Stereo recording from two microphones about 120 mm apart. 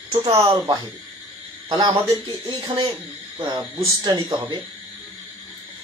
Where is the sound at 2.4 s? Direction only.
45° right (ahead or behind).